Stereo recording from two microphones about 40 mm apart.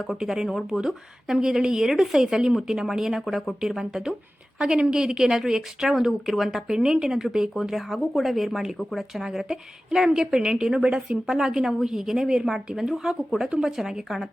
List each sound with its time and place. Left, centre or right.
0.0 s speech: centre
4.5 s speech: right
6.1 s speech: centre
6.6 s speech: centre
10.2 s a woman's voice: centre
13.5 s speech: centre